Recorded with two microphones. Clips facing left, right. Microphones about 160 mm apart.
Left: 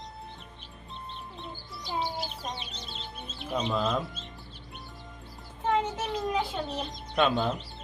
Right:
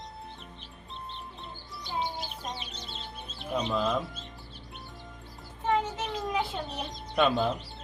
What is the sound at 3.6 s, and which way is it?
Speech, centre (ahead or behind).